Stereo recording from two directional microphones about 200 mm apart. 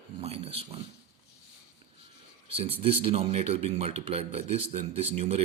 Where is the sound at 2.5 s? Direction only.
30° right (ahead or behind).